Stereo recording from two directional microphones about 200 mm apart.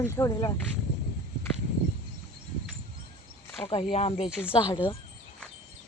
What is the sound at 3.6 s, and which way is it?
Speech, 30° left (ahead or behind).